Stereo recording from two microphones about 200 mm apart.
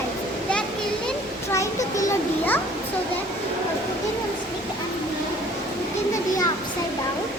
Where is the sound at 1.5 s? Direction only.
15° left (ahead or behind).